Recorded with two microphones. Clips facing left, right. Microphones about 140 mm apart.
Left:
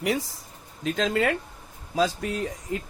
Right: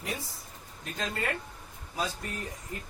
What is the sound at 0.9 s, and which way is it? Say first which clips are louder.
Speech: left 10 dB; 90° left.